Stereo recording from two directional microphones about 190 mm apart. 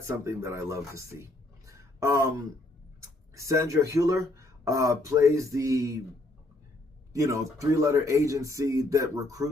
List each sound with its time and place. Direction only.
0.3 s speech: 15° right (ahead or behind)
7.1 s speech: 15° right (ahead or behind)